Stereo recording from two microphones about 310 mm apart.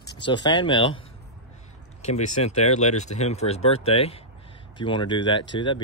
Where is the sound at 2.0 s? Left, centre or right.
Left.